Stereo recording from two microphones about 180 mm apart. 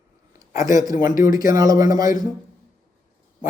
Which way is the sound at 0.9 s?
50° left (ahead or behind).